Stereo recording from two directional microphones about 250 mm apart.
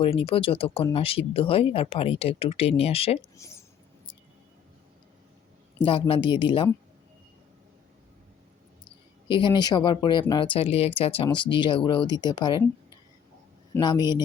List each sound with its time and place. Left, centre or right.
0.0 s speech: left
3.3 s a sound: centre
5.7 s speech: centre
9.2 s speech: centre
13.7 s speech: centre